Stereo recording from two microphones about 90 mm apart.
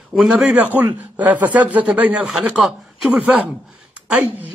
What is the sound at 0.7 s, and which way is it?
A woman's voice, 15° right (ahead or behind).